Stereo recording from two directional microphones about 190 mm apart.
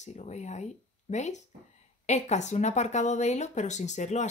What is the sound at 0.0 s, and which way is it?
Speech, 35° left (ahead or behind).